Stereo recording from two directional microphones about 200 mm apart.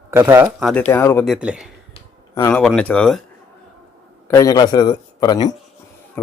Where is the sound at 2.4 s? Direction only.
5° left (ahead or behind).